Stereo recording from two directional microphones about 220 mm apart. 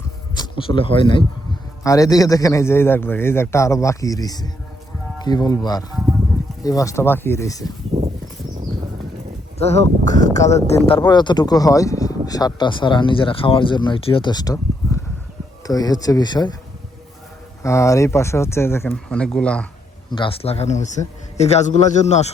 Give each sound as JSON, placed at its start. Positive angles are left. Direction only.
{"t": 0.3, "sound": "a man's voice", "side_deg": 25}
{"t": 7.9, "sound": "a sound", "side_deg": -30}
{"t": 9.6, "sound": "a man's voice", "side_deg": 30}
{"t": 17.6, "sound": "a man's voice", "side_deg": 15}
{"t": 20.1, "sound": "speech", "side_deg": 20}